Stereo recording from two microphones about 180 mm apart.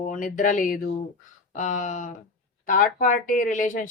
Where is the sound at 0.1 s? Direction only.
45° left (ahead or behind).